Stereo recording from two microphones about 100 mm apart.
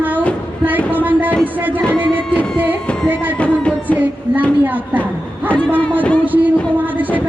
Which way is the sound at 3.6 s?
10° left (ahead or behind).